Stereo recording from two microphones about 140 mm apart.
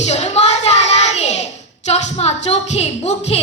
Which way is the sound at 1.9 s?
50° left (ahead or behind).